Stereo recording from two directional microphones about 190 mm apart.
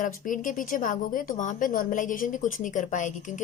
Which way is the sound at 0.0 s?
45° left (ahead or behind).